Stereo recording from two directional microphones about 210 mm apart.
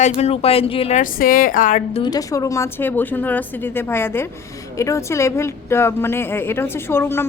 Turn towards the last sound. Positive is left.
turn(degrees=10)  # may be behind; listen again after turning